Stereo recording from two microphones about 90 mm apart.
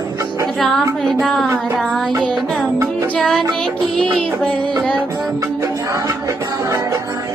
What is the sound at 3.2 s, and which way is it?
Music, 5° left (ahead or behind).